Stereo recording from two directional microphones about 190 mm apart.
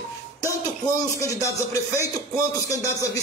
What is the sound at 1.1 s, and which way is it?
Speech, 15° left (ahead or behind).